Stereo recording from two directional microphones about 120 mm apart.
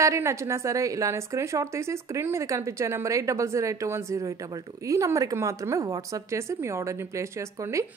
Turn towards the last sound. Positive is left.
turn(degrees=-25)  # may be behind; listen again after turning